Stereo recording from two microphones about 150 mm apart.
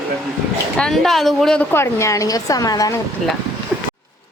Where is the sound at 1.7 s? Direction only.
20° left (ahead or behind).